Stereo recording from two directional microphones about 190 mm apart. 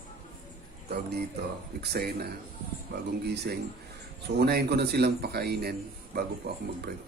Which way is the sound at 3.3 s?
60° right (ahead or behind).